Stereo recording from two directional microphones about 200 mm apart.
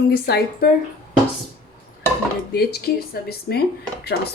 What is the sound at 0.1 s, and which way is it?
Speech, 50° left (ahead or behind).